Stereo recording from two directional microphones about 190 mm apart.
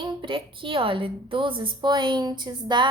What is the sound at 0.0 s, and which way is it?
A woman's voice, 25° right (ahead or behind).